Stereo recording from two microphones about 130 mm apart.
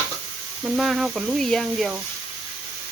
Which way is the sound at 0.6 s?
Centre (ahead or behind).